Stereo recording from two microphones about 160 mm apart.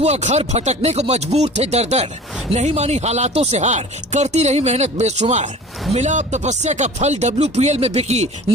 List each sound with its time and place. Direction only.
0.0 s speech: 45° right (ahead or behind)